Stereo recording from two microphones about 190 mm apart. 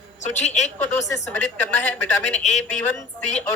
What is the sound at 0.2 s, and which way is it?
Speech, 35° left (ahead or behind).